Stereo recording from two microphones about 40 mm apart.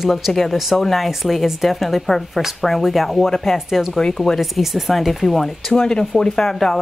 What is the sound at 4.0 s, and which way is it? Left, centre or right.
Speech, centre.